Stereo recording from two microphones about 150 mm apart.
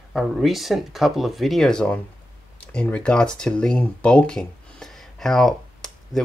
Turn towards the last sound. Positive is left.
turn(degrees=0)  # may be behind; listen again after turning